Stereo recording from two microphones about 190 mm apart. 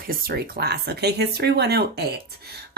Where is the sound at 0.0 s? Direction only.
50° right (ahead or behind).